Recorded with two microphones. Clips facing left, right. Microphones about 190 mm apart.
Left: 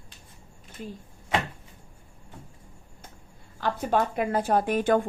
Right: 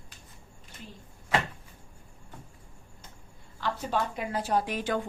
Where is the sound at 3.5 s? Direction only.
50° left (ahead or behind).